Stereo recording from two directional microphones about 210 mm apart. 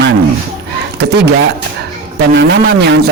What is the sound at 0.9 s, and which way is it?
Speech, 50° right (ahead or behind).